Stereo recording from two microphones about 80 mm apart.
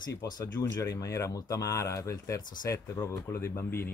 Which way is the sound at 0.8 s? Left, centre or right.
Left.